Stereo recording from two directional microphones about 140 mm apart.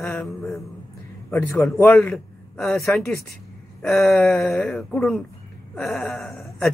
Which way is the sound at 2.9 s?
15° left (ahead or behind).